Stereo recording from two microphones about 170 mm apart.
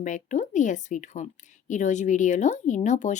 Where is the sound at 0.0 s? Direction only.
45° left (ahead or behind).